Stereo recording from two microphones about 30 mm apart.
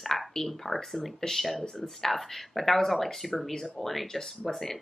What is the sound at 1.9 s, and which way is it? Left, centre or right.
Speech, centre.